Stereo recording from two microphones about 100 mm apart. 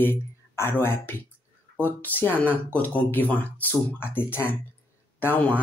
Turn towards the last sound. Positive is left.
turn(degrees=15)  # may be behind; listen again after turning